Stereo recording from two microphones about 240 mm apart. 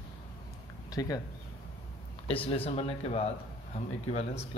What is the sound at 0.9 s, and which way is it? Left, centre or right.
Speech, centre.